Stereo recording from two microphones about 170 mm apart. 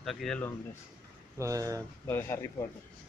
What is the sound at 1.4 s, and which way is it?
Speech, 20° right (ahead or behind).